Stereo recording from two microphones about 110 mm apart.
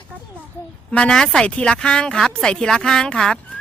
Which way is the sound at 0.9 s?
10° left (ahead or behind).